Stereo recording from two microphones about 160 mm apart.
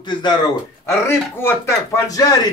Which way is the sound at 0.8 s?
15° left (ahead or behind).